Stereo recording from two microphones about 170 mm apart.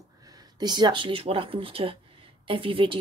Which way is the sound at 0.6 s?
25° right (ahead or behind).